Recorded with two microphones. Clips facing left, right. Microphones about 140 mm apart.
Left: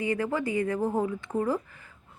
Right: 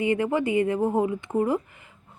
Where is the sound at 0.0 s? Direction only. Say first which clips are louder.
Right 5 dB; 20° right (ahead or behind).